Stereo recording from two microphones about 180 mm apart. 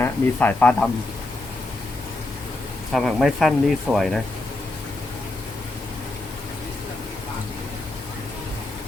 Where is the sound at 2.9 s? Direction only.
Centre (ahead or behind).